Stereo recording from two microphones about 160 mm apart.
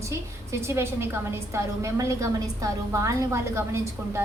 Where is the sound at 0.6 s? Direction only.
15° right (ahead or behind).